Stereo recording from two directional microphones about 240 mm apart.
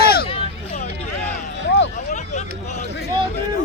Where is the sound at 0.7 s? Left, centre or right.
Left.